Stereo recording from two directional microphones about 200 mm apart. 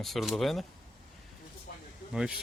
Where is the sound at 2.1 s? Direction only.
5° right (ahead or behind).